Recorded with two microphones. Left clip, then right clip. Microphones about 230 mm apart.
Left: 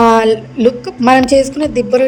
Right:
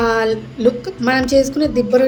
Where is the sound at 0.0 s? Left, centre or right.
Left.